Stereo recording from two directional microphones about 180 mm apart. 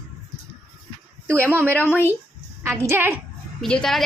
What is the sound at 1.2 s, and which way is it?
Speech, 10° left (ahead or behind).